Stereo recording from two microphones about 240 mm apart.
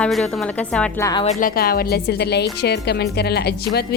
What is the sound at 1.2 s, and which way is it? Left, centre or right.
Speech, left.